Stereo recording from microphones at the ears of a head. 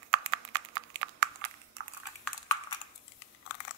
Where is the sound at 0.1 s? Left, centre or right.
Right.